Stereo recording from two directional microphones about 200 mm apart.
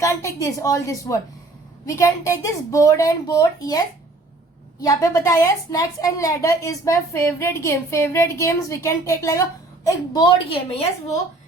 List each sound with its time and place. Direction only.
0.0 s a woman's voice: 15° left (ahead or behind)